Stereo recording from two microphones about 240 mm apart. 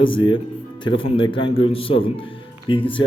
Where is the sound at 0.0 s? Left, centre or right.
Left.